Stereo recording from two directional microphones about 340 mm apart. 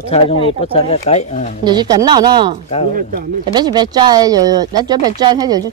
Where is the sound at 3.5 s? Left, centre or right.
Centre.